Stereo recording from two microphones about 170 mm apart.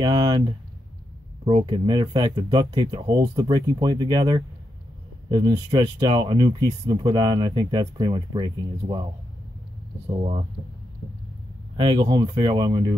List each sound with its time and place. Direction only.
0.0 s speech: 25° right (ahead or behind)
1.4 s speech: 30° right (ahead or behind)
10.0 s speech: 35° right (ahead or behind)
11.7 s speech: 30° right (ahead or behind)